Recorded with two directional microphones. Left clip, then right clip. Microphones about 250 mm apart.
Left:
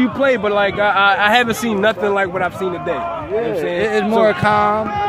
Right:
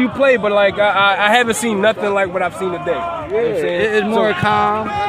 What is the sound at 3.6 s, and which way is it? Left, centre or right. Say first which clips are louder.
Speech: right 1 dB; left.